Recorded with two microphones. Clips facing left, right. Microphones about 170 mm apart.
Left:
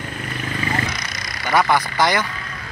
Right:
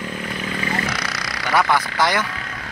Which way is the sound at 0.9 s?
75° right (ahead or behind).